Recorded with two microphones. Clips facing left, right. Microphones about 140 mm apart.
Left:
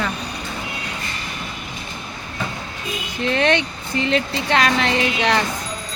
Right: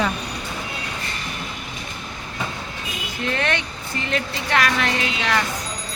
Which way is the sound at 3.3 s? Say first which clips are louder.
Left 6 dB; 20° left (ahead or behind).